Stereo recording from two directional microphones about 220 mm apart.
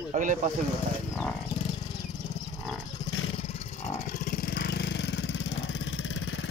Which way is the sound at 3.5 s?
30° left (ahead or behind).